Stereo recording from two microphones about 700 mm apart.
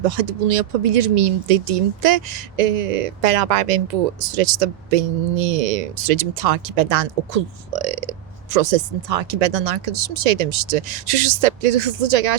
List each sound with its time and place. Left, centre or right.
0.0 s speech: right